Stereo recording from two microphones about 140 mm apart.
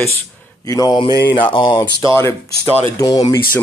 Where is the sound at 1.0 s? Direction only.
35° left (ahead or behind).